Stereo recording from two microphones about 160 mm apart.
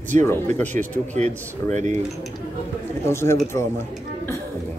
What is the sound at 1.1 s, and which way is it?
Speech, 45° right (ahead or behind).